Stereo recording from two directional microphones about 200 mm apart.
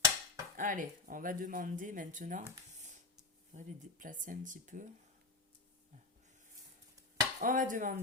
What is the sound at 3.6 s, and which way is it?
Speech, 40° right (ahead or behind).